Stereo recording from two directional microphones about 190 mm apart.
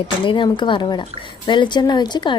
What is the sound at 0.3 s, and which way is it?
Speech, 25° left (ahead or behind).